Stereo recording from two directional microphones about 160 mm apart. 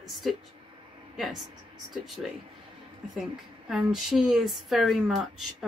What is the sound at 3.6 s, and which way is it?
Speech, 5° right (ahead or behind).